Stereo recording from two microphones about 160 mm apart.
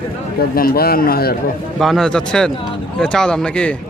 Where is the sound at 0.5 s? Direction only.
70° left (ahead or behind).